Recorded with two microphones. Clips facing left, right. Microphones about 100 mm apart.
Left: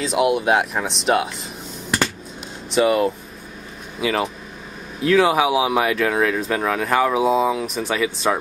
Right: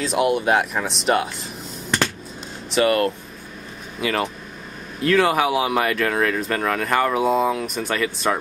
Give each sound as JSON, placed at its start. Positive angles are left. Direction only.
{"t": 0.0, "sound": "speech", "side_deg": 0}
{"t": 1.9, "sound": "finger snapping", "side_deg": 5}
{"t": 2.7, "sound": "speech", "side_deg": 5}